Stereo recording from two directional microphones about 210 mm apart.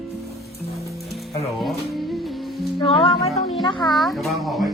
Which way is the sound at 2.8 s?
25° left (ahead or behind).